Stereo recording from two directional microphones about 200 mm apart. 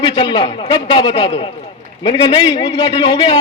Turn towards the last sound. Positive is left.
turn(degrees=20)  # may be behind; listen again after turning